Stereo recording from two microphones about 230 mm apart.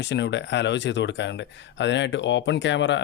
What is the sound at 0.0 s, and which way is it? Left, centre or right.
Speech, left.